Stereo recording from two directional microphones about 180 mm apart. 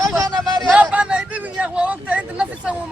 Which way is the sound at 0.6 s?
10° right (ahead or behind).